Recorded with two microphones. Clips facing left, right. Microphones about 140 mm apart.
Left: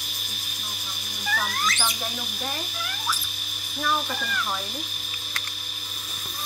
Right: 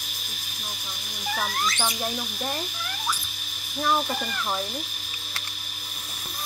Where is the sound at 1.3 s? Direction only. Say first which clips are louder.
Even; 20° right (ahead or behind).